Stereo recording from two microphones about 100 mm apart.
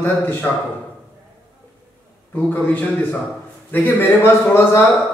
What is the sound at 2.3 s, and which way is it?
A man's voice, 20° left (ahead or behind).